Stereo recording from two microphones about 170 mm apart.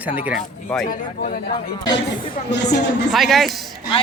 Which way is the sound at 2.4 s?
90° left.